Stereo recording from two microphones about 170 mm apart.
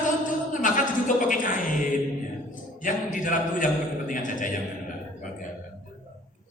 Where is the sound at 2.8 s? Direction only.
50° left (ahead or behind).